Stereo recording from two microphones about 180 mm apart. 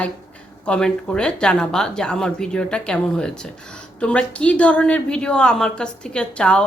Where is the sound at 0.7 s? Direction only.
5° left (ahead or behind).